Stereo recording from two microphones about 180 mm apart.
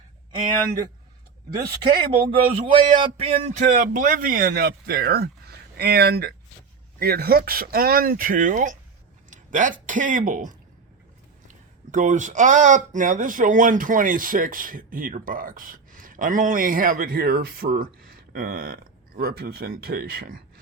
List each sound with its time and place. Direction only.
1.8 s speech: 30° right (ahead or behind); by 10.5 s 50° right (ahead or behind)
11.9 s speech: 45° right (ahead or behind)